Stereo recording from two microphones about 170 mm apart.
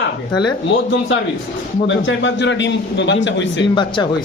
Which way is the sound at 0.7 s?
90° left.